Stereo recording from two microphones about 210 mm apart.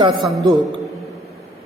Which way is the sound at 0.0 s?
20° right (ahead or behind).